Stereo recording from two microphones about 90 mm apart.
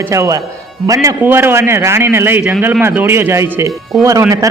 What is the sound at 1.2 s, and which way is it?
Speech, 25° right (ahead or behind).